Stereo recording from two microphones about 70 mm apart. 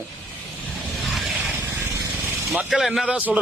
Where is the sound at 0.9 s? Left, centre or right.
Centre.